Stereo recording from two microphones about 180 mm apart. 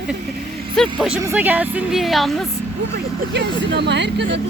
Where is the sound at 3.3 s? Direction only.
70° right (ahead or behind).